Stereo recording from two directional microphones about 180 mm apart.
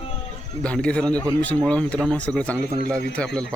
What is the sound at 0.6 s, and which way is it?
Speech, 5° left (ahead or behind).